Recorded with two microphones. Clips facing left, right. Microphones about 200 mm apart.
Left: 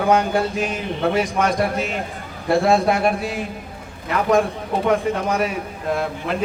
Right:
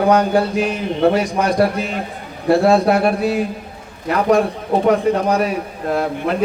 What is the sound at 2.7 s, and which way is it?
Speech, 40° right (ahead or behind).